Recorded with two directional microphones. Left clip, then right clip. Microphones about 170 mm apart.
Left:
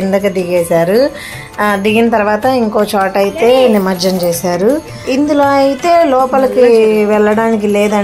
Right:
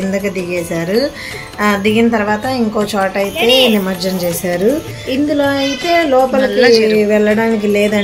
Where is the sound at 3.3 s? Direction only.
40° left (ahead or behind).